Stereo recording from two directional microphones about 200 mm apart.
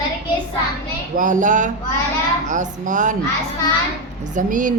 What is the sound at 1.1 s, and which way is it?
A woman's voice, 40° right (ahead or behind).